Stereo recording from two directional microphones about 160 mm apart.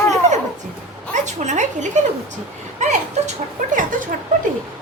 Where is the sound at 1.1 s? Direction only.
50° right (ahead or behind).